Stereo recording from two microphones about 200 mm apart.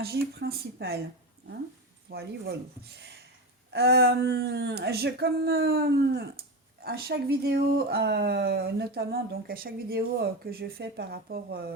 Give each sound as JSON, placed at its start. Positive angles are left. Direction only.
{"t": 0.0, "sound": "speech", "side_deg": -50}
{"t": 2.0, "sound": "speech", "side_deg": -55}